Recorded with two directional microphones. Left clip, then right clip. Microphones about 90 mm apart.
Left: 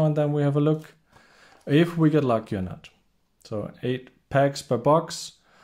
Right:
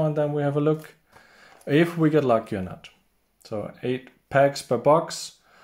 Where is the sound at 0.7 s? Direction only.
25° left (ahead or behind).